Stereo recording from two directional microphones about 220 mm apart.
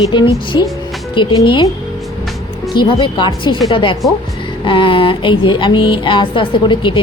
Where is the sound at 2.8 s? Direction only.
20° left (ahead or behind).